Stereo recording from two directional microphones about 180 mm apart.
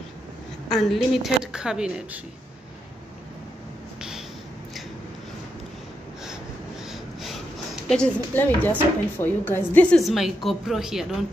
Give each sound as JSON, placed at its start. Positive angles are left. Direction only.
{"t": 0.7, "sound": "a woman's voice", "side_deg": 0}
{"t": 6.9, "sound": "a sound", "side_deg": 0}
{"t": 9.2, "sound": "a woman's voice", "side_deg": 10}